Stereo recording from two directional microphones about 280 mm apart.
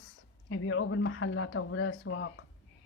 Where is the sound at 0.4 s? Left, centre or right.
Left.